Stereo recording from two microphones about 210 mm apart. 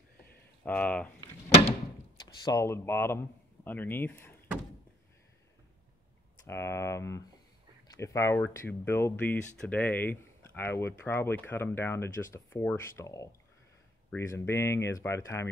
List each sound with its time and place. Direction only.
0.7 s speech: 5° left (ahead or behind)
1.2 s door: 30° left (ahead or behind)
2.2 s speech: 15° left (ahead or behind)
6.4 s speech: 10° left (ahead or behind)